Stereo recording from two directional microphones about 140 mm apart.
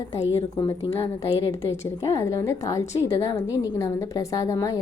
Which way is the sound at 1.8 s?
20° left (ahead or behind).